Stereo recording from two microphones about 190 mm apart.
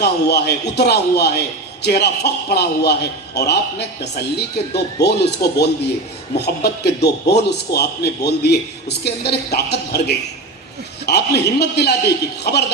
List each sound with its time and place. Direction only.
0.0 s a man's voice: 60° left (ahead or behind)